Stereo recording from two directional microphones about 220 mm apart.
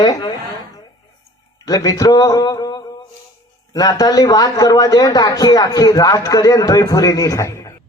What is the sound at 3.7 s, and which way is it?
A man's voice, 15° left (ahead or behind).